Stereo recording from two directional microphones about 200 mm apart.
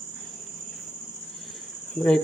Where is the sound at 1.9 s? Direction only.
5° left (ahead or behind).